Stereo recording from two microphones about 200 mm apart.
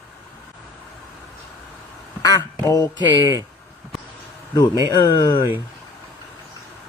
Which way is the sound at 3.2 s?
15° right (ahead or behind).